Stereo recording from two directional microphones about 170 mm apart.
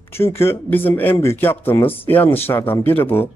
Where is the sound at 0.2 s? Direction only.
15° left (ahead or behind).